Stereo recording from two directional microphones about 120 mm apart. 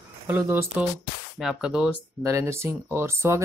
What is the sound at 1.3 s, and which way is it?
Speech, 5° right (ahead or behind).